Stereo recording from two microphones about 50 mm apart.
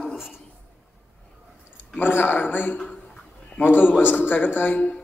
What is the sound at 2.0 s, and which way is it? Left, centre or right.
Speech, left.